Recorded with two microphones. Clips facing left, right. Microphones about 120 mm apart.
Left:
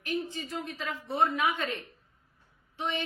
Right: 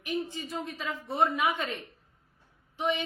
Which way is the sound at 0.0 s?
15° right (ahead or behind).